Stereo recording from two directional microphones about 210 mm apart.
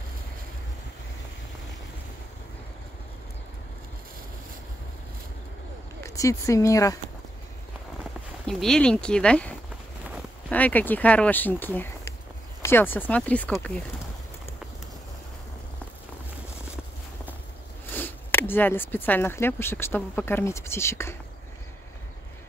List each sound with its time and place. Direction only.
6.0 s speech: 15° left (ahead or behind)
8.5 s speech: centre (ahead or behind)
17.9 s speech: 10° left (ahead or behind)